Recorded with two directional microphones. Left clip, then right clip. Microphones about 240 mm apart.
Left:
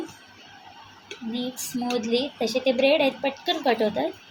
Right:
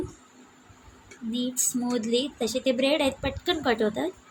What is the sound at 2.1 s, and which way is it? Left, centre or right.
A woman's voice, centre.